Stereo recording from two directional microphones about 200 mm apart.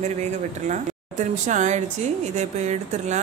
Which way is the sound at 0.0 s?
35° right (ahead or behind).